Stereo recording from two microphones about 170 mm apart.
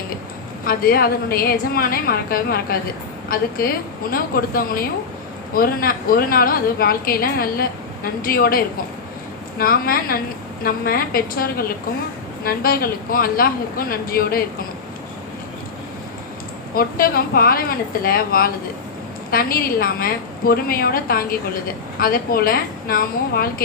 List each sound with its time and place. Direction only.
0.6 s a woman's voice: 60° left (ahead or behind)
16.7 s a woman's voice: 60° left (ahead or behind)